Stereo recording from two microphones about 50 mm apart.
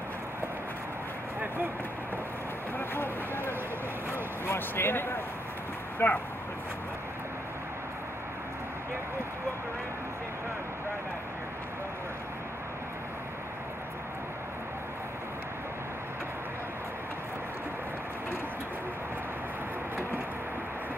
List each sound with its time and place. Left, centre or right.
2.9 s a sound: left
4.1 s vehicle: left
6.0 s speech: left